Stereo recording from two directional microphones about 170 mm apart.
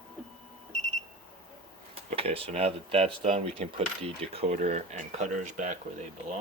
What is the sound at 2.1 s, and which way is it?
Speech, 35° right (ahead or behind).